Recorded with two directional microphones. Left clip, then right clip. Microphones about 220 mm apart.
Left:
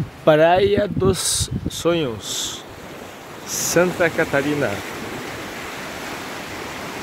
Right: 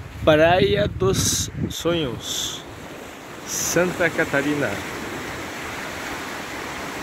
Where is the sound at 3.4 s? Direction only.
50° left (ahead or behind).